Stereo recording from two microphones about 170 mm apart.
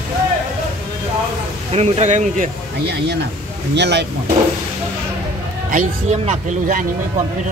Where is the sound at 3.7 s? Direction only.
85° right.